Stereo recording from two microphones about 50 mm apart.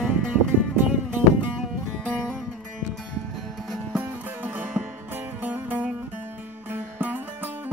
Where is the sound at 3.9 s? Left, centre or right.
Right.